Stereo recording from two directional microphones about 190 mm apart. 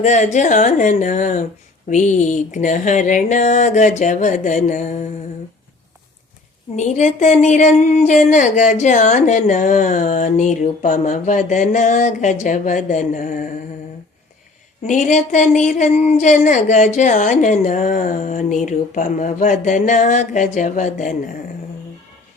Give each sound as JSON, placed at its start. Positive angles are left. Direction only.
{"t": 0.0, "sound": "speech", "side_deg": 40}
{"t": 6.7, "sound": "speech", "side_deg": 40}
{"t": 14.8, "sound": "speech", "side_deg": 40}